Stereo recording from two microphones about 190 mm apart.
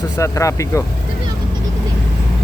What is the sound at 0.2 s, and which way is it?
Speech, 15° left (ahead or behind).